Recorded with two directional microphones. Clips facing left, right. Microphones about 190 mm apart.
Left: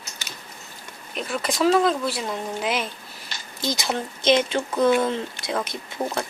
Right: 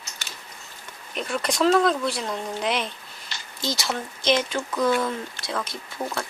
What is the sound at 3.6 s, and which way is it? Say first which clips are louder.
Speech: left 2 dB; 15° left (ahead or behind).